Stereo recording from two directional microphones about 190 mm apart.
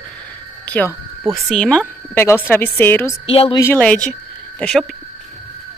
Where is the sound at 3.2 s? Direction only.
30° left (ahead or behind).